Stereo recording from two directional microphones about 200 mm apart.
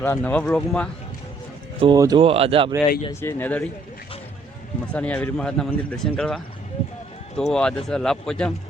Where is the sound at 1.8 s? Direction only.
20° right (ahead or behind).